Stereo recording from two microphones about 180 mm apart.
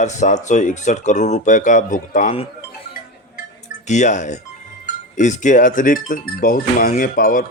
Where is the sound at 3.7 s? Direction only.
40° left (ahead or behind).